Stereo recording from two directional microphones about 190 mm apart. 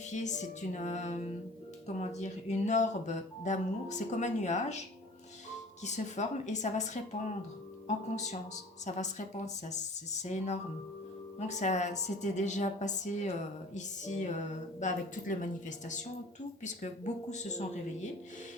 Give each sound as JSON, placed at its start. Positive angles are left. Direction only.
{"t": 0.0, "sound": "speech", "side_deg": 40}
{"t": 5.8, "sound": "speech", "side_deg": 40}